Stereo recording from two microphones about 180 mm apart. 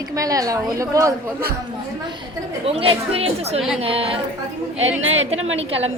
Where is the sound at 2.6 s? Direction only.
35° right (ahead or behind).